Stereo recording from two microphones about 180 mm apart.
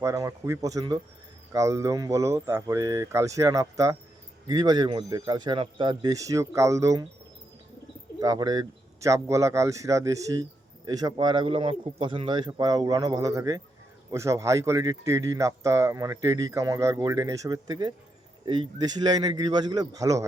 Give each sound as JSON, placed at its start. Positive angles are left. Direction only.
{"t": 0.0, "sound": "a man's voice", "side_deg": -15}
{"t": 8.2, "sound": "a man's voice", "side_deg": -20}